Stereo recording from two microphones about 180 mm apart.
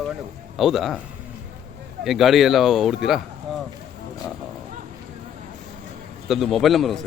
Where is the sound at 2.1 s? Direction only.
Centre (ahead or behind).